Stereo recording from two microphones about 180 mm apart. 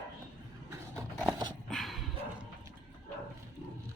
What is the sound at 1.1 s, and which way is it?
Dog, centre (ahead or behind).